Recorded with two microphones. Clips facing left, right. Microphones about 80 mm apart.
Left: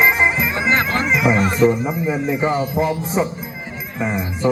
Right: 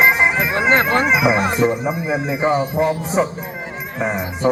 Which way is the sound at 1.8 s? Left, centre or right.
Centre.